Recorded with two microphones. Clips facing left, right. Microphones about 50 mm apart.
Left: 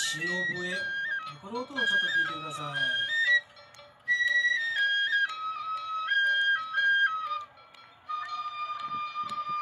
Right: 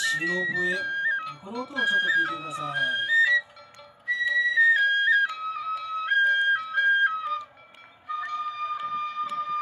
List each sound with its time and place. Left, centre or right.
0.2 s speech: right
1.2 s speech: centre
1.6 s speech: right
4.2 s flute: centre
8.1 s music: centre
8.8 s a sound: centre